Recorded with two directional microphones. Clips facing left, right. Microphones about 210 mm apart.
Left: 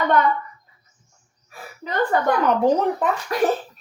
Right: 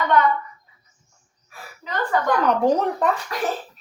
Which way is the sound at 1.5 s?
55° left (ahead or behind).